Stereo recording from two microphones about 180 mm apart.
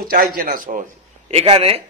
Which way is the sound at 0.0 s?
55° right (ahead or behind).